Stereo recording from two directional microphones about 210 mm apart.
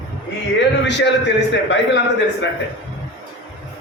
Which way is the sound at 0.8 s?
55° left (ahead or behind).